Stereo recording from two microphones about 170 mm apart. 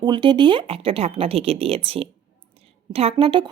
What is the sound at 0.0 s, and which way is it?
Speech, 25° right (ahead or behind).